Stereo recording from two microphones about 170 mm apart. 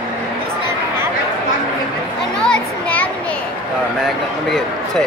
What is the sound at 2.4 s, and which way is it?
Children playing, 5° left (ahead or behind).